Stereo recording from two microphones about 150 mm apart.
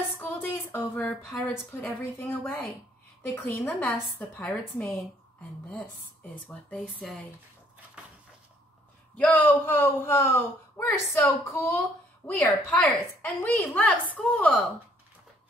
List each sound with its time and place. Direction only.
0.2 s a woman's voice: 15° left (ahead or behind)
6.7 s a woman's voice: 5° left (ahead or behind)
8.0 s cupboard open or close: 5° right (ahead or behind)
9.1 s a woman's voice: 10° left (ahead or behind)